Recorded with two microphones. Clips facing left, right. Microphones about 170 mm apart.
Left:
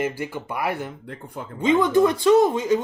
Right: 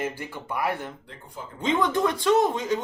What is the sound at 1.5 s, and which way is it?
A woman's voice, 5° left (ahead or behind).